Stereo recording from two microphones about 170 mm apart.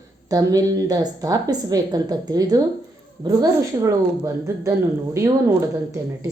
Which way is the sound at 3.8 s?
20° right (ahead or behind).